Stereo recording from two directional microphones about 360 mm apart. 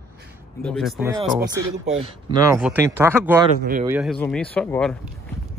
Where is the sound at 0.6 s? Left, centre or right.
Centre.